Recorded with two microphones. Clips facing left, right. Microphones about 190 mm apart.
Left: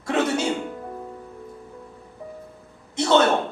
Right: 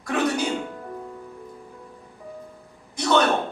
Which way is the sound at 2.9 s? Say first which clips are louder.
Left 2 dB; 25° left (ahead or behind).